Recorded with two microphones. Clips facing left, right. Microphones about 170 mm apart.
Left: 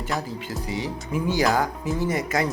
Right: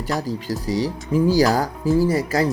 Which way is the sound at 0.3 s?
40° right (ahead or behind).